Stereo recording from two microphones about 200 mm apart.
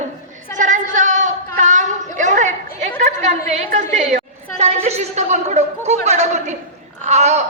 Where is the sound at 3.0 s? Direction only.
35° right (ahead or behind).